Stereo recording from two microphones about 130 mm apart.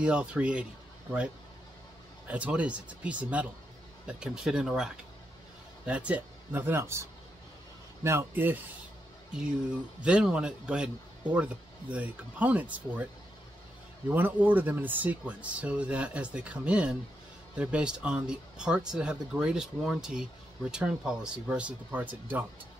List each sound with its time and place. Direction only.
0.0 s speech: 10° right (ahead or behind)
2.2 s speech: 10° right (ahead or behind)
10.0 s speech: 10° right (ahead or behind)
14.1 s speech: 15° right (ahead or behind)